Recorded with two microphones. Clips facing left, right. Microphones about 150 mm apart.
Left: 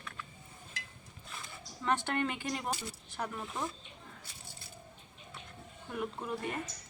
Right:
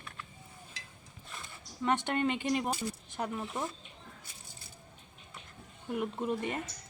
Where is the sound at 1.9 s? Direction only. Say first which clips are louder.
Right 2 dB; 20° right (ahead or behind).